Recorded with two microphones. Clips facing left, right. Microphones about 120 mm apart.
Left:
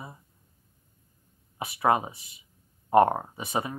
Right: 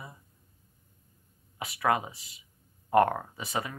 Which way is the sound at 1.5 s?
25° left (ahead or behind).